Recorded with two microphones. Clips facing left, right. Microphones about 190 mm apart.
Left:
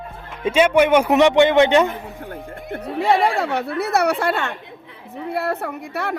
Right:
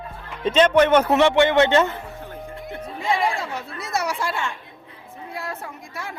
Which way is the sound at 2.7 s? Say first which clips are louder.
Left 7 dB; 65° left (ahead or behind).